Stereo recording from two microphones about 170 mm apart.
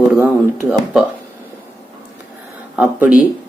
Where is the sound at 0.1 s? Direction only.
10° right (ahead or behind).